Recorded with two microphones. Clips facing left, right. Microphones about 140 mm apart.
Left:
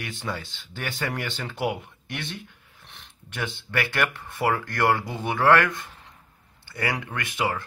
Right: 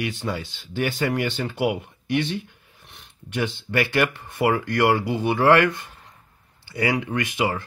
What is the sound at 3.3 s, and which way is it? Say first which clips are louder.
Speech: right 6 dB; 15° right (ahead or behind).